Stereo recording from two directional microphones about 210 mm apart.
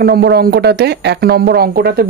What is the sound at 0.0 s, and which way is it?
Speech, 50° right (ahead or behind).